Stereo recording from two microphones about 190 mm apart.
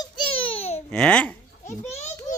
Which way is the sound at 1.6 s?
35° left (ahead or behind).